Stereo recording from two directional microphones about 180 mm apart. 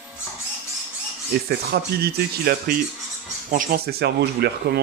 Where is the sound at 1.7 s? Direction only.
60° right (ahead or behind).